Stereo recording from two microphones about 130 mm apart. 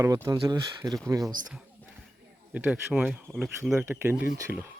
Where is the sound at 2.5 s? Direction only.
10° right (ahead or behind).